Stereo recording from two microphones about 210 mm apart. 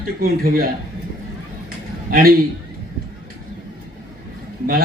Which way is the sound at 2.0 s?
45° right (ahead or behind).